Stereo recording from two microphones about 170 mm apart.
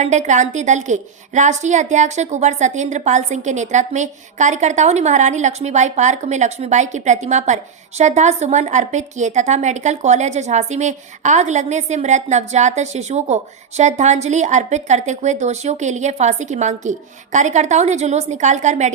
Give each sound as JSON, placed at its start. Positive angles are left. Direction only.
{"t": 0.0, "sound": "a woman's voice", "side_deg": -45}